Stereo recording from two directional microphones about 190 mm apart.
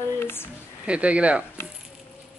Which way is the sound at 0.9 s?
5° right (ahead or behind).